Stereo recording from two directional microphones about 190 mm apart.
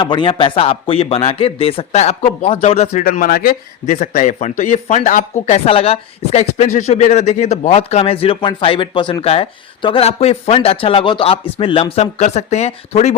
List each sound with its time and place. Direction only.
0.0 s a man's voice: 25° left (ahead or behind)
3.0 s a man's voice: 50° left (ahead or behind)